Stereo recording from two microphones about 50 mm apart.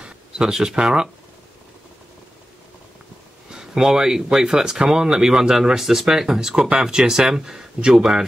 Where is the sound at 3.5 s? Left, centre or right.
Centre.